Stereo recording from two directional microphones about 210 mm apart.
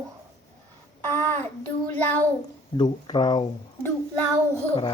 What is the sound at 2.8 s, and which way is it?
Speech, 20° left (ahead or behind).